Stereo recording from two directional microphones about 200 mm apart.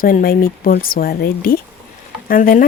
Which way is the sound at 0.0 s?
45° left (ahead or behind).